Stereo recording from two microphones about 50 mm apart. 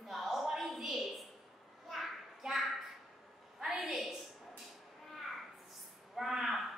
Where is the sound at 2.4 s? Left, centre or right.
Centre.